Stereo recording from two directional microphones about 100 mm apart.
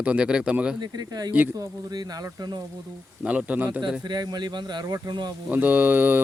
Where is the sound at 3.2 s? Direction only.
10° right (ahead or behind).